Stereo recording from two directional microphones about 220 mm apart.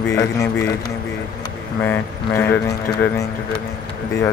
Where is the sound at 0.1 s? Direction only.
10° left (ahead or behind).